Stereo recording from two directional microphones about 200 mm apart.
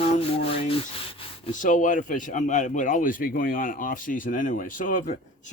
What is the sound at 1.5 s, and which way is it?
A man's voice, 40° left (ahead or behind).